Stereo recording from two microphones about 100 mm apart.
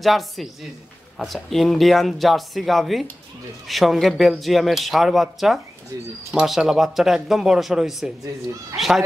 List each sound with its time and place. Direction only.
0.0 s a man's voice: centre (ahead or behind)